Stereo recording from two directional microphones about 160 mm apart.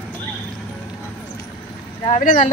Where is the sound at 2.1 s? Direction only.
55° left (ahead or behind).